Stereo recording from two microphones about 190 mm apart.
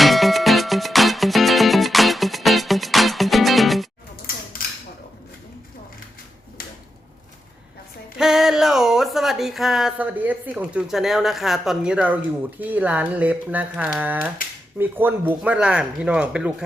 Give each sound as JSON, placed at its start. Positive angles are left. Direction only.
{"t": 0.0, "sound": "music", "side_deg": 0}
{"t": 6.6, "sound": "a sound", "side_deg": 50}
{"t": 8.2, "sound": "speech", "side_deg": 0}